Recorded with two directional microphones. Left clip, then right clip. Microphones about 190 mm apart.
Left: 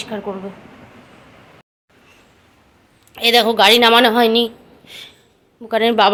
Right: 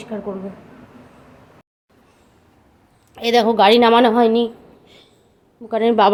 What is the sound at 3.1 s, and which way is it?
A woman's voice, 20° right (ahead or behind).